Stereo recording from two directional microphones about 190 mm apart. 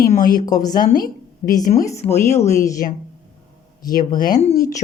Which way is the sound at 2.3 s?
40° left (ahead or behind).